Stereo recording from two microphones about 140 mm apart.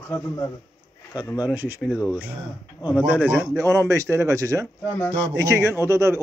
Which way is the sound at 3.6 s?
20° right (ahead or behind).